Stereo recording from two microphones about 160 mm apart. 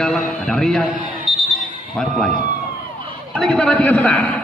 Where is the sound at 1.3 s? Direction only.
Centre (ahead or behind).